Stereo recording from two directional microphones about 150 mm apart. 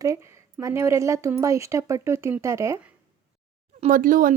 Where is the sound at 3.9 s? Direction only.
65° right (ahead or behind).